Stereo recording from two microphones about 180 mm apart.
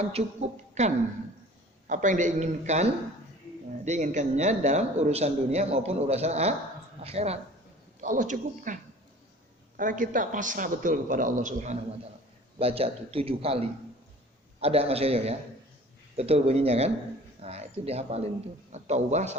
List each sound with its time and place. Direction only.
0.0 s a man's voice: 35° right (ahead or behind)
8.0 s a man's voice: 45° right (ahead or behind)